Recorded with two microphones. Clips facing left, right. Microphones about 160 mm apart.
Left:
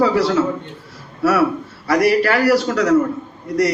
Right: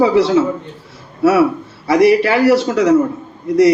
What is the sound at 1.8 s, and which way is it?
Speech, 25° right (ahead or behind).